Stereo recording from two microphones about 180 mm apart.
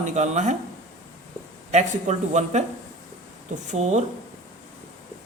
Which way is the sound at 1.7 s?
40° right (ahead or behind).